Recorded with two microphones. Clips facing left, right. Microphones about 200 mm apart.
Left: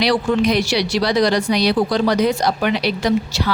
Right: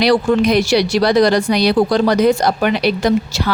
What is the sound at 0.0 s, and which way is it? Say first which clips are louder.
Speech: right 4 dB; 45° right (ahead or behind).